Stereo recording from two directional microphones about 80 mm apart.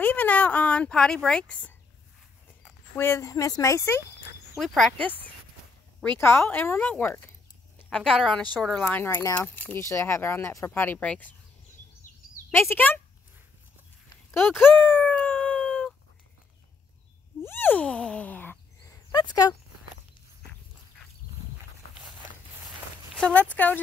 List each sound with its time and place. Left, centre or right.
0.0 s speech: left
3.0 s speech: left
3.3 s speech: left
4.6 s speech: centre
6.1 s a woman's voice: left
7.9 s speech: centre
8.9 s a woman's voice: left
12.5 s a woman's voice: left
14.6 s a sound: left
17.4 s a sound: left
19.1 s speech: left
23.3 s a woman's voice: centre